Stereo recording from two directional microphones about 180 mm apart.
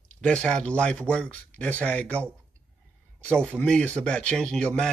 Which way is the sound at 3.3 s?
5° left (ahead or behind).